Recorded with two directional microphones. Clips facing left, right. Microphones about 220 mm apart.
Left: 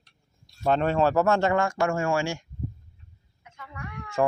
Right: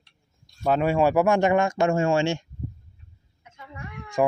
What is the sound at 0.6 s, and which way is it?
Speech, 5° right (ahead or behind).